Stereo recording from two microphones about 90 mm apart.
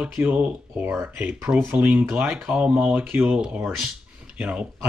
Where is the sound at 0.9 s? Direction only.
30° right (ahead or behind).